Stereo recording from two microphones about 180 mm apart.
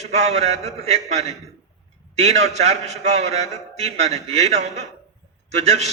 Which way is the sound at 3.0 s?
35° right (ahead or behind).